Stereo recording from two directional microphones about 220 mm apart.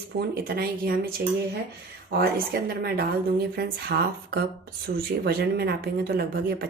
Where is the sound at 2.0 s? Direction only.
45° right (ahead or behind).